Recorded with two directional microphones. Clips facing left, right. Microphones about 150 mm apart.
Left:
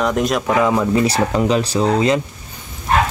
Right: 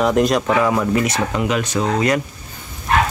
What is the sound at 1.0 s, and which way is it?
Speech, 35° left (ahead or behind).